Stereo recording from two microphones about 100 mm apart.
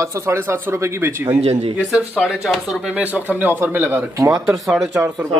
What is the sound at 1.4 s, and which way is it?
Speech, 90° right.